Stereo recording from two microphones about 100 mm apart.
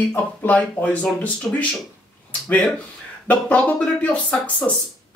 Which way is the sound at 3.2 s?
15° left (ahead or behind).